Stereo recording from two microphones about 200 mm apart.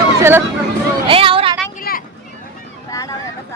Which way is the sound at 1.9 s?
50° left (ahead or behind).